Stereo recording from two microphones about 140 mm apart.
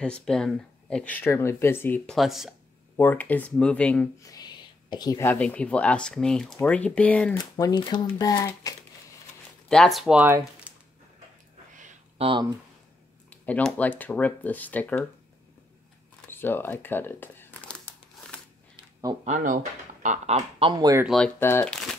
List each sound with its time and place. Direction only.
0.0 s speech: 5° left (ahead or behind)
2.0 s speech: centre (ahead or behind)
3.0 s speech: 15° left (ahead or behind)
4.2 s a sound: 25° left (ahead or behind)
5.2 s speech: 10° left (ahead or behind)
7.3 s speech: 25° left (ahead or behind)
9.7 s speech: 5° left (ahead or behind)
10.2 s speech: 15° right (ahead or behind)
12.2 s speech: 35° right (ahead or behind)
13.3 s speech: 5° left (ahead or behind)
16.3 s crumpling: 15° left (ahead or behind)
19.2 s speech: 65° right (ahead or behind); by 20.7 s 45° right (ahead or behind)
21.0 s speech: centre (ahead or behind)
21.4 s speech: 15° left (ahead or behind)